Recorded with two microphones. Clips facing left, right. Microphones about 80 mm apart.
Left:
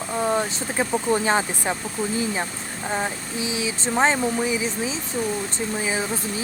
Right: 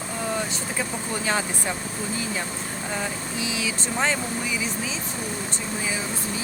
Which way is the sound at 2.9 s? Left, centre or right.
Left.